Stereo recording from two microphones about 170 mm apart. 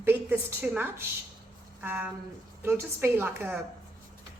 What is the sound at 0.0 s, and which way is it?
A woman's voice, 10° right (ahead or behind).